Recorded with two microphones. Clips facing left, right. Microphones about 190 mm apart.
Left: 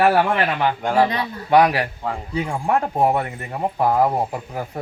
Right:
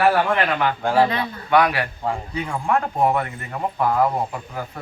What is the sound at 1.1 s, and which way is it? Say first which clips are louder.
A man's voice: left 2 dB; 35° left (ahead or behind).